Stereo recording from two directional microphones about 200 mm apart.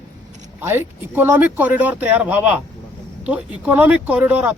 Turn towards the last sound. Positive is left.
turn(degrees=-10)  # may be behind; listen again after turning